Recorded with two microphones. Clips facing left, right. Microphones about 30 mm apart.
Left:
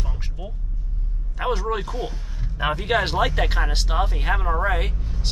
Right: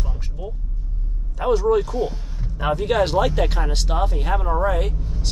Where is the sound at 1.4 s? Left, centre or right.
Left.